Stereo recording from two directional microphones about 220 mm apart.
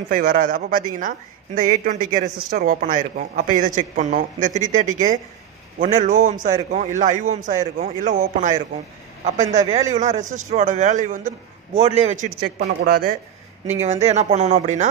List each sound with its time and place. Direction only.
0.1 s a man's voice: 40° right (ahead or behind)
13.7 s a man's voice: 30° right (ahead or behind)